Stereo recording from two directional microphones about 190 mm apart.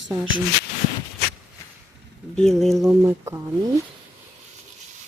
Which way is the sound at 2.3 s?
Centre (ahead or behind).